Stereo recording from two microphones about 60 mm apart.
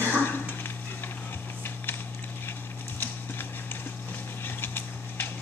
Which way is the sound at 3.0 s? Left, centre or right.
Left.